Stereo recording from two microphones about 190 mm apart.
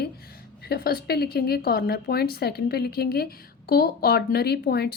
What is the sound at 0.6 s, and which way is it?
Speech, 55° left (ahead or behind).